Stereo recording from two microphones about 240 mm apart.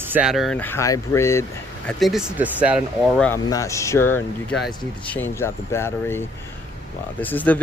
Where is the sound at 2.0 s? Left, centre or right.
Centre.